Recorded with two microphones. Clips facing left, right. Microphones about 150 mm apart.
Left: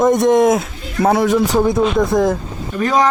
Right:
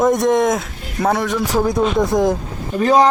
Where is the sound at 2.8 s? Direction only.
30° right (ahead or behind).